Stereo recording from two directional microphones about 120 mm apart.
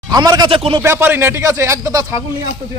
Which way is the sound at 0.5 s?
50° right (ahead or behind).